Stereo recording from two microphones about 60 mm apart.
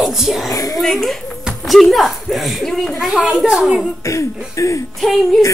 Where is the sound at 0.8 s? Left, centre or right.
Centre.